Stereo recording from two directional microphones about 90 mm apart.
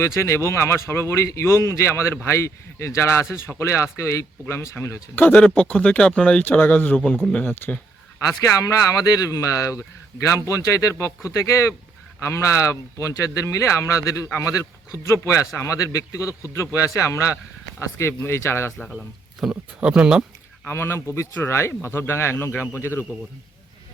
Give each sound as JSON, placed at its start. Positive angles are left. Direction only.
{"t": 0.0, "sound": "speech", "side_deg": 30}
{"t": 5.2, "sound": "speech", "side_deg": 15}
{"t": 7.4, "sound": "speech", "side_deg": 25}
{"t": 8.4, "sound": "speech", "side_deg": 40}
{"t": 18.9, "sound": "speech", "side_deg": 0}
{"t": 19.8, "sound": "speech", "side_deg": -10}
{"t": 20.7, "sound": "speech", "side_deg": 25}